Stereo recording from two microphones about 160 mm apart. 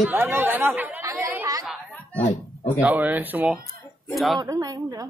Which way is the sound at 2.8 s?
10° right (ahead or behind).